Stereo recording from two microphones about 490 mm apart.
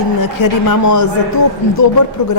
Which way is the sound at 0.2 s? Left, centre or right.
Left.